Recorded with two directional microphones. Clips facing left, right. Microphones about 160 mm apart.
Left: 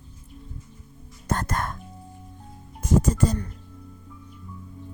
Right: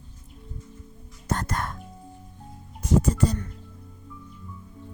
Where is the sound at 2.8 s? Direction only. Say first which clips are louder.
Left 1 dB; 45° left (ahead or behind).